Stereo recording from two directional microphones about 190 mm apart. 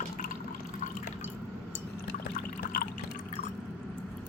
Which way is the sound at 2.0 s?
55° left (ahead or behind).